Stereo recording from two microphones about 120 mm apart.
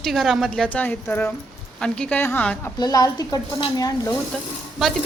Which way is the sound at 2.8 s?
35° left (ahead or behind).